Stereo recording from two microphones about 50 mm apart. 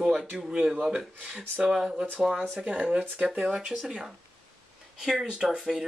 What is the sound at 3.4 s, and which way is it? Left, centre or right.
Speech, centre.